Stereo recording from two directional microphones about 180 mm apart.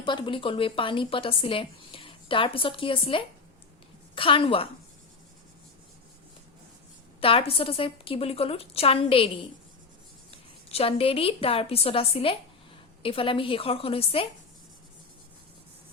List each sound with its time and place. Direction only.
0.0 s speech: 25° left (ahead or behind)
7.2 s a woman's voice: 30° left (ahead or behind)
10.3 s a woman's voice: 30° left (ahead or behind)